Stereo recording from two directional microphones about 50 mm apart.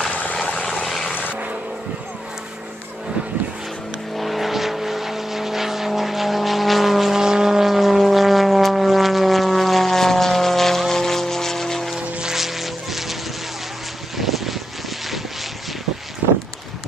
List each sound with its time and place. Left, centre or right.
0.1 s vehicle: left
4.2 s vehicle: centre
12.2 s music: centre
14.1 s vehicle: centre